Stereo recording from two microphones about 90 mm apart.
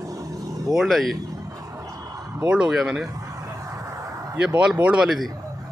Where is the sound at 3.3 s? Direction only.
35° right (ahead or behind).